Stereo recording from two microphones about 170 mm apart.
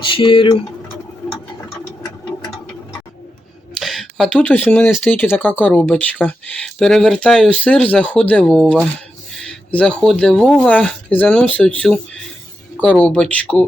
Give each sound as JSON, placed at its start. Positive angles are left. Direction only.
{"t": 0.0, "sound": "speech", "side_deg": 30}
{"t": 3.8, "sound": "speech", "side_deg": 0}